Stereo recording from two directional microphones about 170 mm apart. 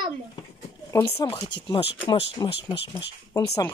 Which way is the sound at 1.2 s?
25° left (ahead or behind).